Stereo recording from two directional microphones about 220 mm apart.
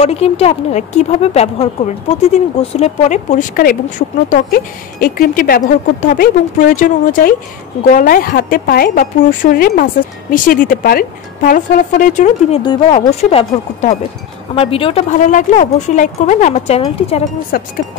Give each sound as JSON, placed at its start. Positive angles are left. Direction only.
{"t": 0.0, "sound": "a woman's voice", "side_deg": 30}
{"t": 5.0, "sound": "a woman's voice", "side_deg": 40}
{"t": 17.5, "sound": "music", "side_deg": 45}